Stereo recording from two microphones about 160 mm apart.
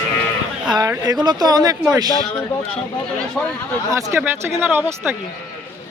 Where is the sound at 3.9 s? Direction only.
20° right (ahead or behind).